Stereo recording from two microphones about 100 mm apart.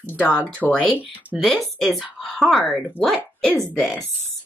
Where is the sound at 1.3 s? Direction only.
Centre (ahead or behind).